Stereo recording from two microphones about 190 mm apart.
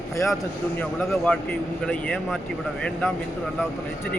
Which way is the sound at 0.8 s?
5° left (ahead or behind).